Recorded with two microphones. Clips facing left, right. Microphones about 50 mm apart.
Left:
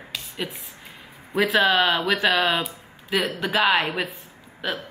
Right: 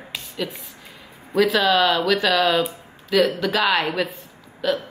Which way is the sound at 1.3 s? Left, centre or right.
Left.